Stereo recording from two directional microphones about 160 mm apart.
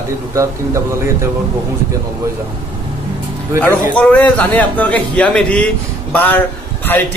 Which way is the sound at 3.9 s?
10° left (ahead or behind).